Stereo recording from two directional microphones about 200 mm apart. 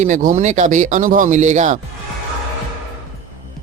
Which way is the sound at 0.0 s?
40° right (ahead or behind).